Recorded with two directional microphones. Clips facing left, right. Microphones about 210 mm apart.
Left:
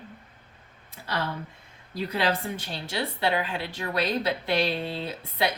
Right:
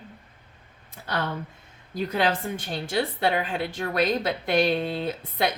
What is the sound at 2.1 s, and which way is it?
A woman's voice, 50° right (ahead or behind).